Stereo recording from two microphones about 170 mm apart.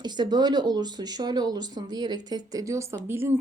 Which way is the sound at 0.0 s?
25° right (ahead or behind).